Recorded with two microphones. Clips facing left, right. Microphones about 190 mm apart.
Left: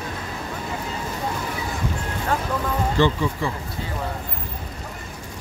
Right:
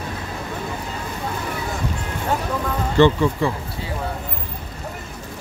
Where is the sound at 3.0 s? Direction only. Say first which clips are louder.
Right 6 dB; 65° right (ahead or behind).